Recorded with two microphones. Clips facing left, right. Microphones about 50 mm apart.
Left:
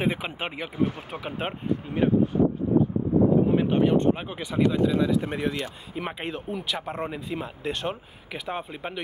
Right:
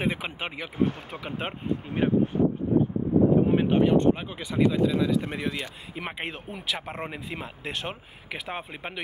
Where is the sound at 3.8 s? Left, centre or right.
Centre.